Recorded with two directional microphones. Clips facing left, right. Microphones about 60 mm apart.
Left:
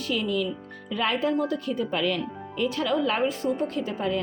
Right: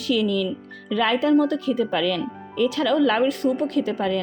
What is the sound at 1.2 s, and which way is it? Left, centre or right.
A woman's voice, right.